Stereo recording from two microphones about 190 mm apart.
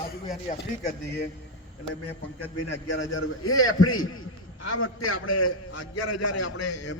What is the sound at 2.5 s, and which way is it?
A man's voice, 90° left.